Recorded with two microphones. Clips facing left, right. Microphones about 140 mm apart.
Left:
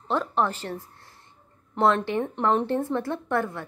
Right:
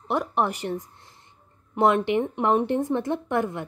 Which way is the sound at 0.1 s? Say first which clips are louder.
Even; 15° right (ahead or behind).